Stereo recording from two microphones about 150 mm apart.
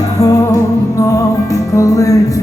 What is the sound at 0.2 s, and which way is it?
Music, 25° left (ahead or behind).